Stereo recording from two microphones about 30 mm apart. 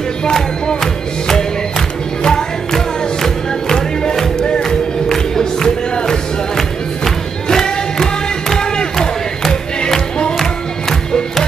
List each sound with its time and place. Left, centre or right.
0.2 s music: left
2.2 s music: left
4.6 s music: centre
10.4 s music: centre